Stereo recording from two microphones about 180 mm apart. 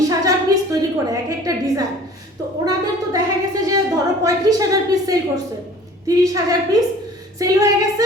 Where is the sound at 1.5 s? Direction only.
20° right (ahead or behind).